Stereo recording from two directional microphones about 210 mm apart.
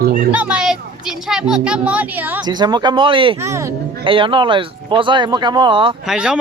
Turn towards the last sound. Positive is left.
turn(degrees=-5)  # may be behind; listen again after turning